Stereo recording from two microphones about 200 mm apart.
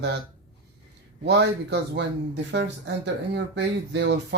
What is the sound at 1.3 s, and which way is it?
Speech, 55° right (ahead or behind).